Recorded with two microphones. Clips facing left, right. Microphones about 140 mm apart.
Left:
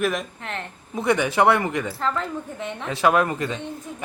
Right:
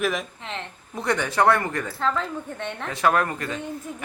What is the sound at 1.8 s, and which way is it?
A woman's voice, centre (ahead or behind).